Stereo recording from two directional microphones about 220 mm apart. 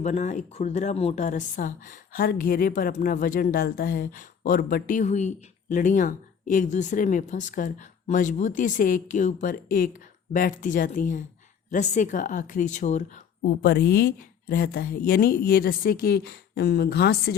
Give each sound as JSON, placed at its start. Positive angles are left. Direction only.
{"t": 0.0, "sound": "a woman's voice", "side_deg": 35}